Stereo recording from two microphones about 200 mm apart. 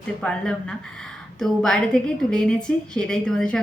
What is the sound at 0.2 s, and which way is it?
Speech, 5° left (ahead or behind).